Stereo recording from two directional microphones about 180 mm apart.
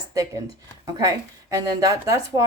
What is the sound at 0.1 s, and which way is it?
Speech, 15° right (ahead or behind).